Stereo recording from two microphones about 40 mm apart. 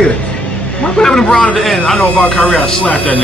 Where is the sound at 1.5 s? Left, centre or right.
Centre.